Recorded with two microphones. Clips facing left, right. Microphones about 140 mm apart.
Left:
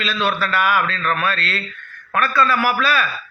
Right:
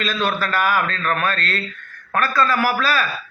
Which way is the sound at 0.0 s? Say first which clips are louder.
Left 1 dB; 45° right (ahead or behind).